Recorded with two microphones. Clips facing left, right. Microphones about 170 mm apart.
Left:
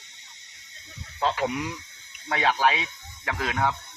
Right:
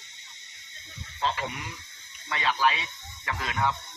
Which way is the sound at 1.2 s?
65° left (ahead or behind).